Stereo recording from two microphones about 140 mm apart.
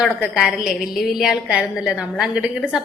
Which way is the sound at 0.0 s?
Centre (ahead or behind).